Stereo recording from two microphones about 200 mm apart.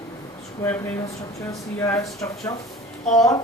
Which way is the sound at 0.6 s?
15° left (ahead or behind).